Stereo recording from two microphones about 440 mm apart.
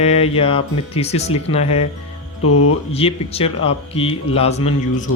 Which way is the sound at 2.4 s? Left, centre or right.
Left.